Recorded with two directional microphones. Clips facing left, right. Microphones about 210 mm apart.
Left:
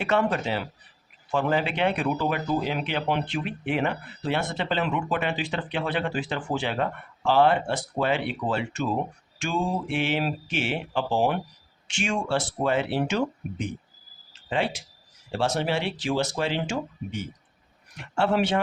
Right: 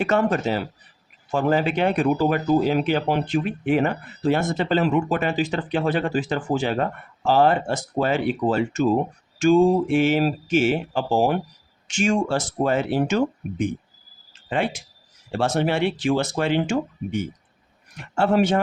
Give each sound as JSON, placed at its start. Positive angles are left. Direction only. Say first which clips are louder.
{"t": 0.0, "sound": "speech", "louder": "right 4 dB", "side_deg": -45}